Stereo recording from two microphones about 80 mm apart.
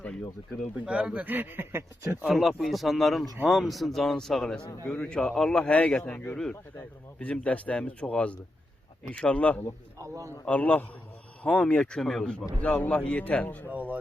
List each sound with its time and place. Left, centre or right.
0.9 s a man's voice: centre; by 1.8 s right
2.3 s a man's voice: centre
10.0 s a man's voice: right
10.4 s a man's voice: centre
13.7 s a man's voice: right